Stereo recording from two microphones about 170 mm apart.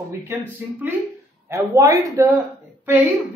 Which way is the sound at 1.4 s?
15° right (ahead or behind).